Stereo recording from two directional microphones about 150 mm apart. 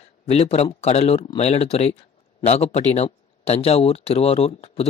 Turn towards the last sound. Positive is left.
turn(degrees=45)  # may be behind; listen again after turning